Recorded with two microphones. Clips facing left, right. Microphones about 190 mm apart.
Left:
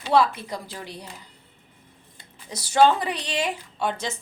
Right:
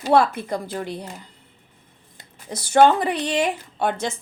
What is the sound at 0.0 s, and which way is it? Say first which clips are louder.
Speech: right 3 dB; 45° right (ahead or behind).